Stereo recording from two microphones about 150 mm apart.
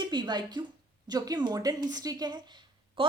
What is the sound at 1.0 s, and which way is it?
A woman's voice, 25° right (ahead or behind).